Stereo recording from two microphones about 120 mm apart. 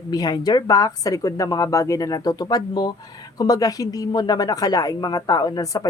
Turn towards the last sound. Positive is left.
turn(degrees=30)  # may be behind; listen again after turning